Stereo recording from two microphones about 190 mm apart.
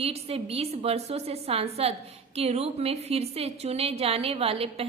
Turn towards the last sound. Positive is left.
turn(degrees=-30)  # may be behind; listen again after turning